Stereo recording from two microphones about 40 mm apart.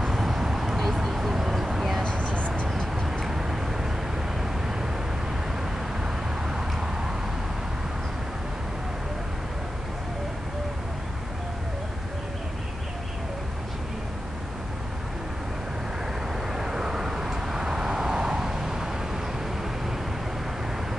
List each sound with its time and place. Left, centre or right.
0.0 s a sound: centre
2.0 s vehicle: left
2.7 s tick-tock: centre
3.3 s tick-tock: centre
6.0 s vehicle: centre
16.5 s vehicle: centre